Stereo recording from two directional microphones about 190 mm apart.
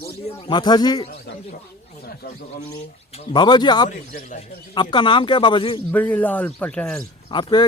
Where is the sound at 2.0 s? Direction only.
55° left (ahead or behind).